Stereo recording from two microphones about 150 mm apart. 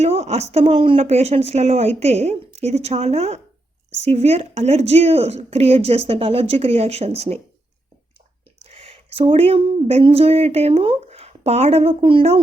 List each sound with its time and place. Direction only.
0.0 s speech: 45° right (ahead or behind)
8.7 s speech: 40° right (ahead or behind)